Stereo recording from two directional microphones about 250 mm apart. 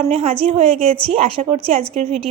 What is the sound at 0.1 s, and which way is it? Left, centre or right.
A woman's voice, right.